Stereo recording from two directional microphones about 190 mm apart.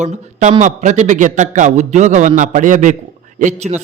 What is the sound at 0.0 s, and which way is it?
A man's voice, 40° right (ahead or behind).